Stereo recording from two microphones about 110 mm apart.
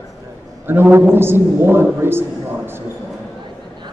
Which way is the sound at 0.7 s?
20° right (ahead or behind).